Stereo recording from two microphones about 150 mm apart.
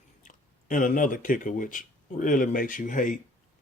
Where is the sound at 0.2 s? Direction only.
60° left (ahead or behind).